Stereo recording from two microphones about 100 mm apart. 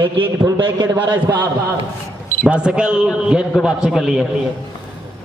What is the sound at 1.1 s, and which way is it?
A man's voice, 20° right (ahead or behind).